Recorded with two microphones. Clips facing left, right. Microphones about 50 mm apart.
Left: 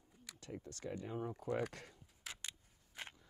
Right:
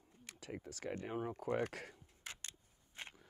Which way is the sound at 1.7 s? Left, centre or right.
Right.